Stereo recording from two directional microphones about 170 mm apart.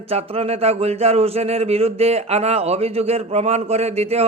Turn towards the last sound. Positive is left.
turn(degrees=-40)  # may be behind; listen again after turning